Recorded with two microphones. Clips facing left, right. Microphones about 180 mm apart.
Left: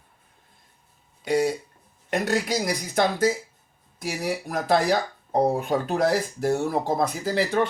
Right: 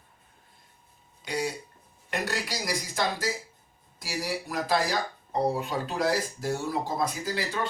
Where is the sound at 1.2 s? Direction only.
60° left (ahead or behind).